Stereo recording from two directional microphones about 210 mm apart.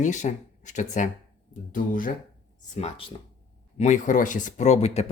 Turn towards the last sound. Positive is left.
turn(degrees=30)  # may be behind; listen again after turning